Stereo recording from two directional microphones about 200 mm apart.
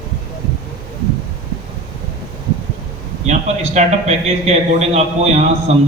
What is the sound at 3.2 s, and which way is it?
A man's voice, 35° right (ahead or behind).